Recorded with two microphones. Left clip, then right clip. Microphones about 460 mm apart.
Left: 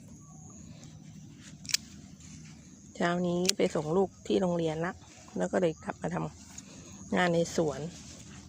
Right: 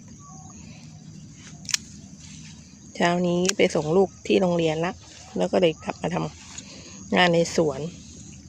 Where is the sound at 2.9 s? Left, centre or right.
Right.